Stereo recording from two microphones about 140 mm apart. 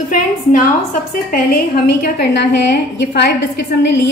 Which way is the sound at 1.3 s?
90° left.